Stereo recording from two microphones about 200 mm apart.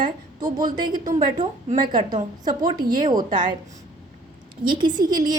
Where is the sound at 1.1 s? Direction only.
35° right (ahead or behind).